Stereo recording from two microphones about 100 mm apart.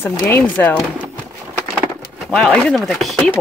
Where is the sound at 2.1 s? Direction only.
5° left (ahead or behind).